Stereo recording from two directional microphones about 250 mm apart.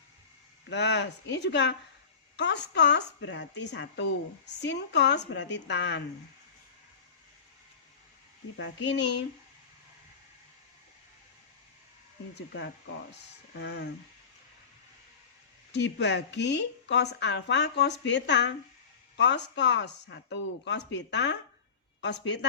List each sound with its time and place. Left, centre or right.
0.7 s speech: left
8.5 s speech: left
13.6 s speech: left
15.7 s speech: left